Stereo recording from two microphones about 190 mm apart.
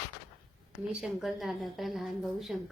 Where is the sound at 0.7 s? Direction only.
5° right (ahead or behind).